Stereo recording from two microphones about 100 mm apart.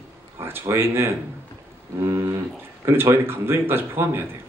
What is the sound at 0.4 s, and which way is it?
Speech, 25° right (ahead or behind).